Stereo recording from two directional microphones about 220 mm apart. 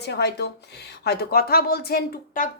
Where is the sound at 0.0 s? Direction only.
50° left (ahead or behind).